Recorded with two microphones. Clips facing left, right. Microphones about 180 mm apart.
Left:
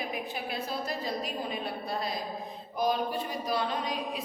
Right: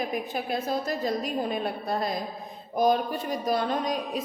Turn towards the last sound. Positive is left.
turn(degrees=-45)  # may be behind; listen again after turning